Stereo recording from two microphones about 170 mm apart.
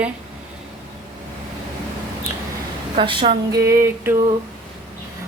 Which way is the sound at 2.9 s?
30° right (ahead or behind).